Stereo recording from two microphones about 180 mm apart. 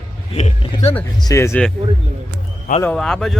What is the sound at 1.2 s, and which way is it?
Speech, 15° left (ahead or behind).